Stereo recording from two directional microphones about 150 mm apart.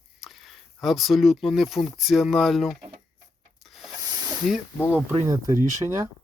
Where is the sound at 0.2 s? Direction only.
Centre (ahead or behind).